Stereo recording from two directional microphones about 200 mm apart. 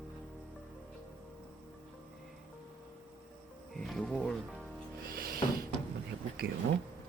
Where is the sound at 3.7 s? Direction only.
Centre (ahead or behind).